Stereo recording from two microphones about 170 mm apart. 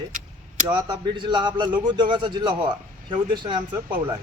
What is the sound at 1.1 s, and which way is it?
Speech, 25° right (ahead or behind).